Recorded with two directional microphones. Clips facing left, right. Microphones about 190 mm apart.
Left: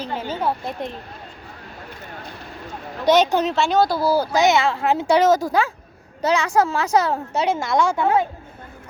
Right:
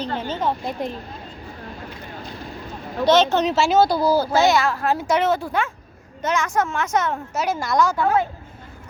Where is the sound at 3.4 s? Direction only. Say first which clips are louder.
Right 1 dB; 5° right (ahead or behind); by 8.2 s 20° left (ahead or behind).